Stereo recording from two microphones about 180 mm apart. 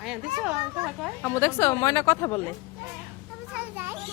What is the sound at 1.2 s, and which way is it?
A woman's voice, 10° left (ahead or behind).